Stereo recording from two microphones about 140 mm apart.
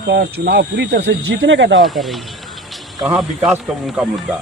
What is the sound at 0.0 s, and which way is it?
Speech, 90° right.